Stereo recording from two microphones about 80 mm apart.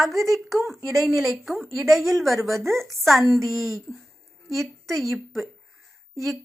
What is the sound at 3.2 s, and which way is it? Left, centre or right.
Speech, right.